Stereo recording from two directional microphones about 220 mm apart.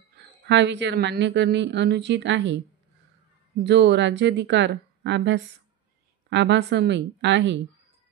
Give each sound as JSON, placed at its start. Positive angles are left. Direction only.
{"t": 0.5, "sound": "a woman's voice", "side_deg": -55}
{"t": 3.6, "sound": "a woman's voice", "side_deg": -50}